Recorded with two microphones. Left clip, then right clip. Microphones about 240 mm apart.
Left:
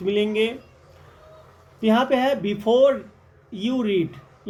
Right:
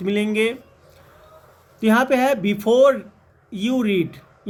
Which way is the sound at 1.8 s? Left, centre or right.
Right.